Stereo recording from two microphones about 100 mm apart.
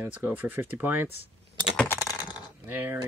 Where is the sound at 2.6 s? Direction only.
20° right (ahead or behind).